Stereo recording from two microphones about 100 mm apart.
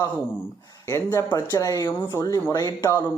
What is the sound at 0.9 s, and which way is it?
Speech, 25° left (ahead or behind).